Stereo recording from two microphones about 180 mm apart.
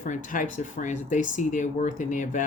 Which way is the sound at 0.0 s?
45° left (ahead or behind).